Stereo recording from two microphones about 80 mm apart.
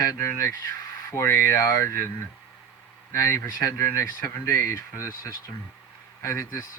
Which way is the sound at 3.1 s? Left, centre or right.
Left.